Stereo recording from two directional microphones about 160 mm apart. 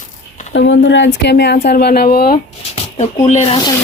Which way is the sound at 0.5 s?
90° left.